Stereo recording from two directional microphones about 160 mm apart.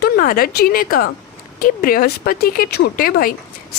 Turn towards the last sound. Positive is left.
turn(degrees=65)  # may be behind; listen again after turning